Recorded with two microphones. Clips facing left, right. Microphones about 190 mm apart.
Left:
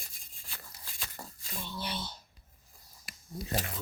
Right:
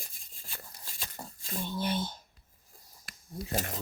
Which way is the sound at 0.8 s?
30° right (ahead or behind).